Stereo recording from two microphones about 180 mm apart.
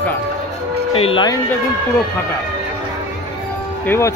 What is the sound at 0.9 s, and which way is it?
Speech, 30° left (ahead or behind).